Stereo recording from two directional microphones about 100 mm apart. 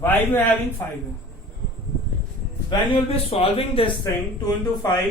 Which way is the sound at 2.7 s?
65° left (ahead or behind).